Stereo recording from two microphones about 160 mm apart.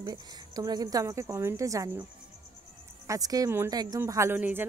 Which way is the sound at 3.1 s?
20° right (ahead or behind).